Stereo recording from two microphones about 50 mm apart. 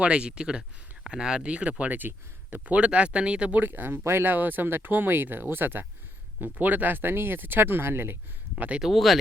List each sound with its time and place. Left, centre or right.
0.0 s speech: right
1.8 s speech: right
3.6 s speech: right
8.5 s speech: right
8.9 s speech: centre